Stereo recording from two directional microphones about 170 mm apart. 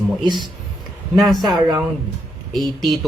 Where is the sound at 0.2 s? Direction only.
25° right (ahead or behind).